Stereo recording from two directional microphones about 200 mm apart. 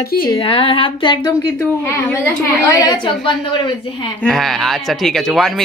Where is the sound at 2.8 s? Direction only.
20° left (ahead or behind).